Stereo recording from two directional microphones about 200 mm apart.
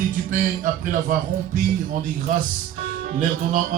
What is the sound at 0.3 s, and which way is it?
Music, 40° right (ahead or behind).